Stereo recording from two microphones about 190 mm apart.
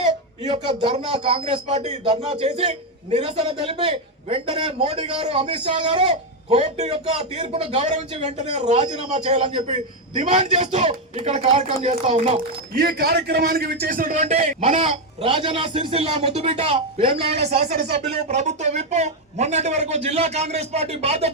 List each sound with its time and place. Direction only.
0.0 s speech: 35° right (ahead or behind)
12.7 s speech: 55° right (ahead or behind); by 21.2 s 35° right (ahead or behind)